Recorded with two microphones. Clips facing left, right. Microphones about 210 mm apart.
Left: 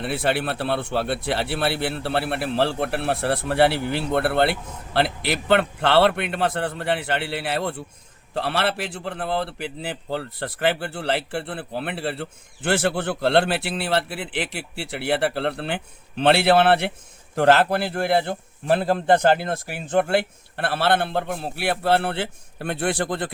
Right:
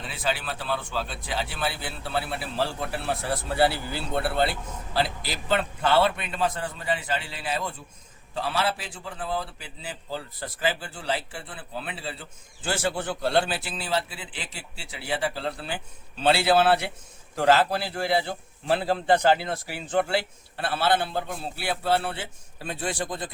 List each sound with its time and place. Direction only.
0.0 s a man's voice: 65° left (ahead or behind)